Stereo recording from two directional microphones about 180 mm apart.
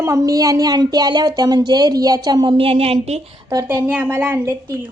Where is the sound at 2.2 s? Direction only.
25° right (ahead or behind).